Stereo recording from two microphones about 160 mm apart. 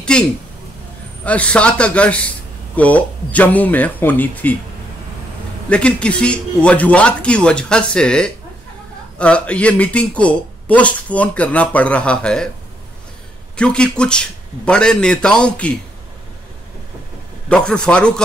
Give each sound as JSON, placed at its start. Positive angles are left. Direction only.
{"t": 0.1, "sound": "a man's voice", "side_deg": 5}
{"t": 5.7, "sound": "speech", "side_deg": 5}
{"t": 13.6, "sound": "a man's voice", "side_deg": 5}
{"t": 17.5, "sound": "a man's voice", "side_deg": 5}